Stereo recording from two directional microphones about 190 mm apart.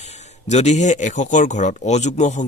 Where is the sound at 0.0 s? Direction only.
35° left (ahead or behind).